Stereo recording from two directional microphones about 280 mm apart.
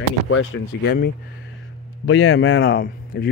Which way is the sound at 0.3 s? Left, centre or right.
Left.